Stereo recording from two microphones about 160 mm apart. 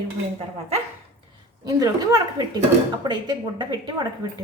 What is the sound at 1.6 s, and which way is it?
A woman's voice, 20° right (ahead or behind).